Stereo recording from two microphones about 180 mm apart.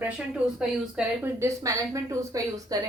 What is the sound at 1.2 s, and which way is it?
Speech, 15° right (ahead or behind).